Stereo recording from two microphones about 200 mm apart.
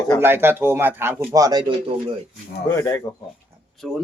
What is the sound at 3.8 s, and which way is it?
Speech, centre (ahead or behind).